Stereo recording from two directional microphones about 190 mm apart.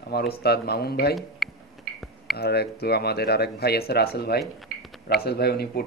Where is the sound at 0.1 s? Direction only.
55° left (ahead or behind).